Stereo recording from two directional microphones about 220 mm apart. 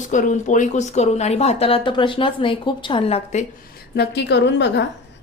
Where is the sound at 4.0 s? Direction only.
50° left (ahead or behind).